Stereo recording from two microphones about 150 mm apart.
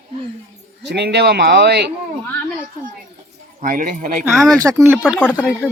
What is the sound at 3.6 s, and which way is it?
Speech, 65° right (ahead or behind).